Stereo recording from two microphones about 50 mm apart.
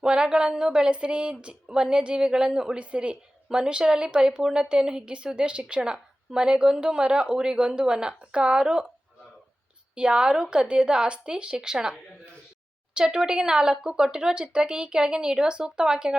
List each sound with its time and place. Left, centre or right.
0.0 s speech: centre
9.9 s speech: centre